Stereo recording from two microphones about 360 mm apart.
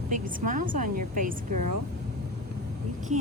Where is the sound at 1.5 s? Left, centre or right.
Right.